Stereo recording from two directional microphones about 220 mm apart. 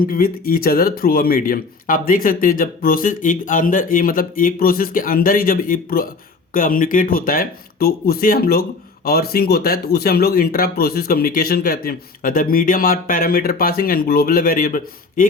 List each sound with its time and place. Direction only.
0.0 s speech: 40° left (ahead or behind)